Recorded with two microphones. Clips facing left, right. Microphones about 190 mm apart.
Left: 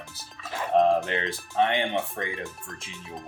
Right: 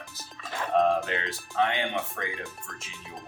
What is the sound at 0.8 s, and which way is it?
Speech, 30° left (ahead or behind).